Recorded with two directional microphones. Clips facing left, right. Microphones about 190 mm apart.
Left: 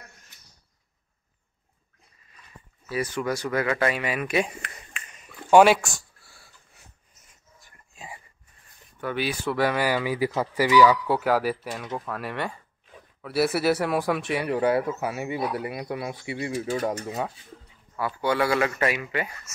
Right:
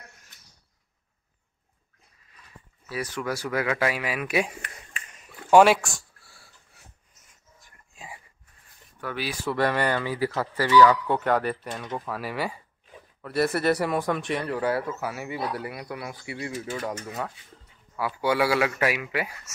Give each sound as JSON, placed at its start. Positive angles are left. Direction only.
{"t": 2.9, "sound": "speech", "side_deg": 0}
{"t": 5.5, "sound": "a sound", "side_deg": 0}
{"t": 7.6, "sound": "whispering", "side_deg": 0}
{"t": 9.0, "sound": "speech", "side_deg": 0}
{"t": 14.5, "sound": "speech", "side_deg": 20}
{"t": 17.9, "sound": "speech", "side_deg": -5}